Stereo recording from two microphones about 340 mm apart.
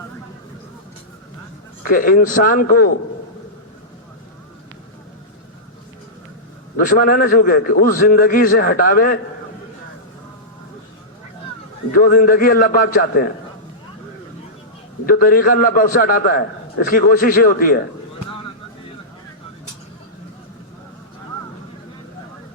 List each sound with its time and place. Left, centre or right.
1.8 s a man's voice: left
6.7 s a man's voice: left
11.9 s a man's voice: left
15.0 s a man's voice: left